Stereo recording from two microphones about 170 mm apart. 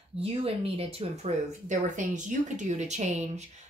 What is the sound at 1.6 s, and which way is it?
A woman's voice, 45° right (ahead or behind).